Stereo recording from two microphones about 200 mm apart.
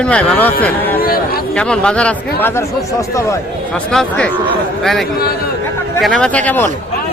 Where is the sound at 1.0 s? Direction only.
50° left (ahead or behind).